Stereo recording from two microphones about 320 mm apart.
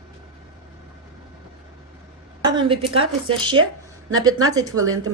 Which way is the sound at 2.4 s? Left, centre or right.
Centre.